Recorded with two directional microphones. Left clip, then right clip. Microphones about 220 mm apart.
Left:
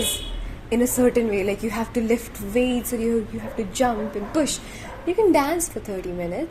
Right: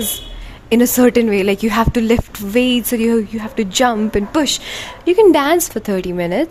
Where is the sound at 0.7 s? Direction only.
45° right (ahead or behind).